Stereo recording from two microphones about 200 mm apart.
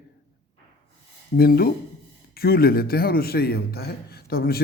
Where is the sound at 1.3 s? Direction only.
50° left (ahead or behind).